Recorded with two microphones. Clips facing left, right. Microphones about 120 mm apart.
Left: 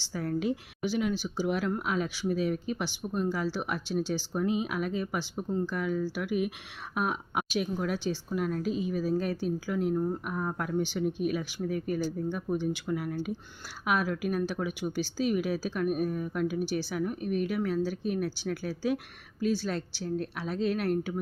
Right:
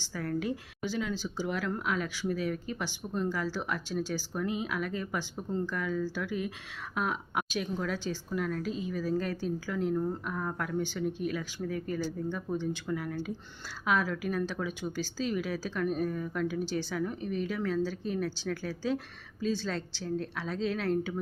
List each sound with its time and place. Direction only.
0.1 s a woman's voice: 20° left (ahead or behind)